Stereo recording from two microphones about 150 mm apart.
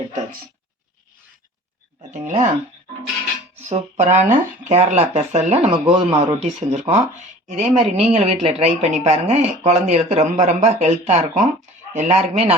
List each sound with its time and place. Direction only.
2.0 s speech: 50° right (ahead or behind)
3.6 s speech: 50° right (ahead or behind)